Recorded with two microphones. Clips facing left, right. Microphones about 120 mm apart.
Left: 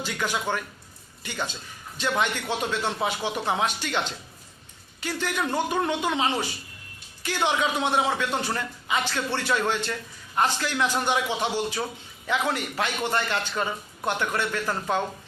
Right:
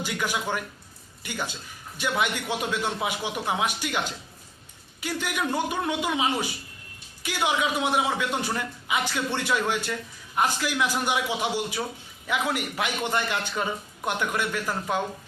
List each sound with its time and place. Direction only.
0.0 s a man's voice: 15° right (ahead or behind)